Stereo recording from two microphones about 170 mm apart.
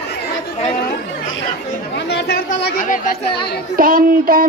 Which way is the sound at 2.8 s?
50° left (ahead or behind).